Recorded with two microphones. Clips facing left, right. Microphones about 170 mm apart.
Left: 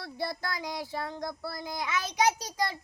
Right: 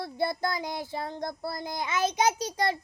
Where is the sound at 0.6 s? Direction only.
50° right (ahead or behind).